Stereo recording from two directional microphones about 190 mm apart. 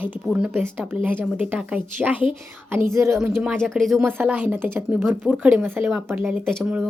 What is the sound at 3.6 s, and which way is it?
Speech, centre (ahead or behind).